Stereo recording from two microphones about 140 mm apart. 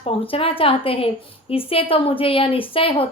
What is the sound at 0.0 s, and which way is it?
A woman's voice, 40° left (ahead or behind).